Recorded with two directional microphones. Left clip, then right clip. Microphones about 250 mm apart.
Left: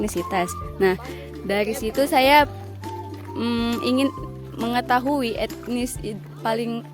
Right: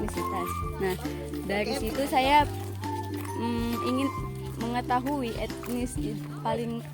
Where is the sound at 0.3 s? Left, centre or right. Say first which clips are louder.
Left 8 dB; left.